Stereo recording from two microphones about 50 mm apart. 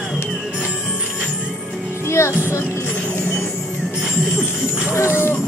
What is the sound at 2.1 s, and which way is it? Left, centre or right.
Music, left.